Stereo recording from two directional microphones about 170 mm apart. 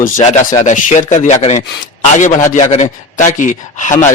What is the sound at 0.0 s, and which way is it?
Speech, 45° left (ahead or behind).